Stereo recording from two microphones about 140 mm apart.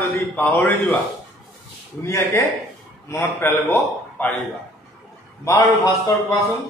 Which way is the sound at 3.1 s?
15° left (ahead or behind).